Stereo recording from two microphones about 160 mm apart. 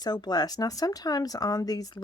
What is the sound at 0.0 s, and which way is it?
Speech, 25° left (ahead or behind).